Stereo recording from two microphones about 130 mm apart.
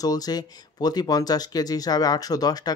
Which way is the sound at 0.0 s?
30° left (ahead or behind).